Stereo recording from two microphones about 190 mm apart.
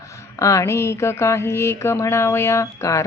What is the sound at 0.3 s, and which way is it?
Speech, 15° left (ahead or behind).